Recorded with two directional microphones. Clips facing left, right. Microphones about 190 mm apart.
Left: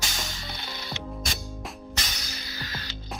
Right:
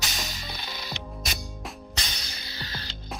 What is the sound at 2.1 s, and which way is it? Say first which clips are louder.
Music: left 2 dB; 30° right (ahead or behind).